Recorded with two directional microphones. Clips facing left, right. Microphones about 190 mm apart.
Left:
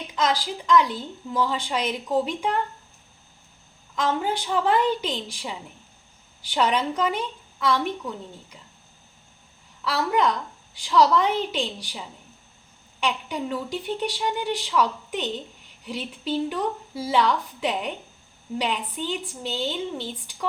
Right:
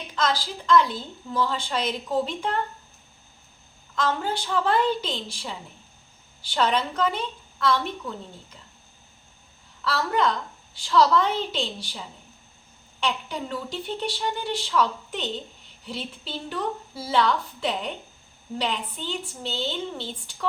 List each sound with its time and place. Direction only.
0.1 s a woman's voice: 15° left (ahead or behind)
3.9 s a woman's voice: 15° left (ahead or behind)
9.8 s a woman's voice: 15° left (ahead or behind)